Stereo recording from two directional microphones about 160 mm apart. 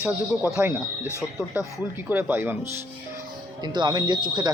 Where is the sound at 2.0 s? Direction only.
10° right (ahead or behind).